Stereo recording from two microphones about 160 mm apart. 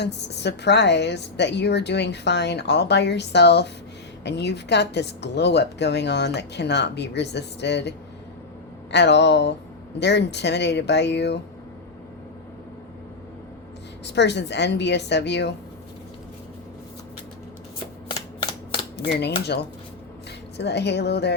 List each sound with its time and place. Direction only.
0.0 s a woman's voice: 90° left
14.0 s a woman's voice: 90° left
18.9 s a woman's voice: 90° left
20.6 s a woman's voice: 90° left